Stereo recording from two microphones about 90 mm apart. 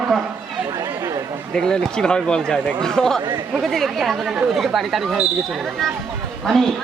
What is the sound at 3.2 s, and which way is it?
Speech, 50° right (ahead or behind).